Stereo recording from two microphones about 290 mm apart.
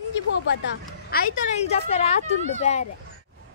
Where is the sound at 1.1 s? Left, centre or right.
Left.